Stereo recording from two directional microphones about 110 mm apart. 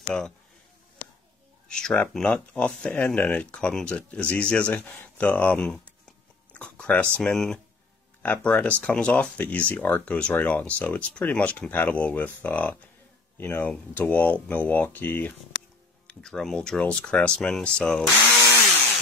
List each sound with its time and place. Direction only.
0.0 s speech: 5° left (ahead or behind)
1.7 s speech: 5° left (ahead or behind)
16.1 s speech: 5° left (ahead or behind)